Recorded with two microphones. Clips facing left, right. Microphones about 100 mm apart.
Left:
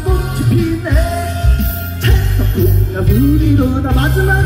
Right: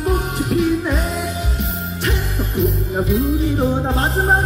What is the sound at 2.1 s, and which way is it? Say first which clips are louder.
Music: left 4 dB; 10° right (ahead or behind).